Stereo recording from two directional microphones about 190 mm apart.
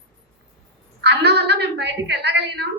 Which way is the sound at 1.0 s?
60° right (ahead or behind).